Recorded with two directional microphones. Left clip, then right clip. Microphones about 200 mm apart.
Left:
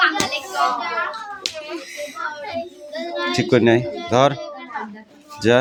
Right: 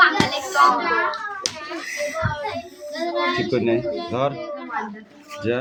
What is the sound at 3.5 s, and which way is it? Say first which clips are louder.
Speech: left 5 dB; 50° left (ahead or behind).